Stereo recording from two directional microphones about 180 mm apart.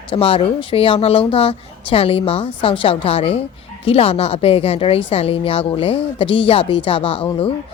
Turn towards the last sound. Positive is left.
turn(degrees=30)  # may be behind; listen again after turning